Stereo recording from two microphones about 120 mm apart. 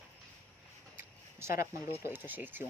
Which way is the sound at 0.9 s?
20° right (ahead or behind).